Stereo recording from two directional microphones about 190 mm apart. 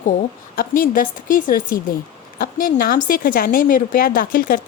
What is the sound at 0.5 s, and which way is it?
A woman's voice, 50° left (ahead or behind).